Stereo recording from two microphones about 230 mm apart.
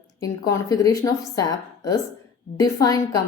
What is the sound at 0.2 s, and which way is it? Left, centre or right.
Speech, centre.